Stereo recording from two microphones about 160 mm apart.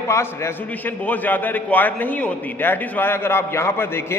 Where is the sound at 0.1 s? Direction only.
15° left (ahead or behind).